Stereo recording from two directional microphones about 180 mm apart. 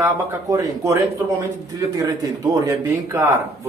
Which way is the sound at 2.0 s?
20° right (ahead or behind).